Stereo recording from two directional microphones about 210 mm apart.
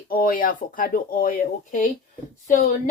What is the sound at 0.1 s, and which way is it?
Speech, 45° left (ahead or behind).